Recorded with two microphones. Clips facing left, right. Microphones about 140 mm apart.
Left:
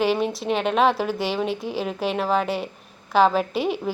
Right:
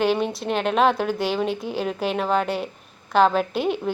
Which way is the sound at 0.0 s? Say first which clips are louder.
Even; centre (ahead or behind).